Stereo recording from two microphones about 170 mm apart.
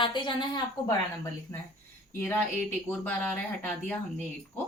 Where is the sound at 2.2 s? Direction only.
10° left (ahead or behind).